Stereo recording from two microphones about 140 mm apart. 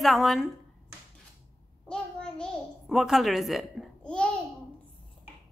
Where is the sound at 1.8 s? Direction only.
5° left (ahead or behind).